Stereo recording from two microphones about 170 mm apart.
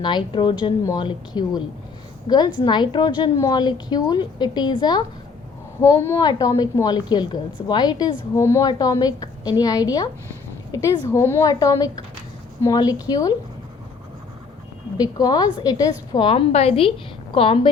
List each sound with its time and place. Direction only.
0.0 s a woman's voice: 30° left (ahead or behind)
5.8 s a woman's voice: 15° left (ahead or behind)
14.9 s a woman's voice: 25° left (ahead or behind)